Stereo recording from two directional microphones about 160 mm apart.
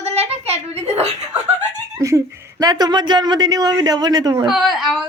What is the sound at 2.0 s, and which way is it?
Speech, 20° right (ahead or behind).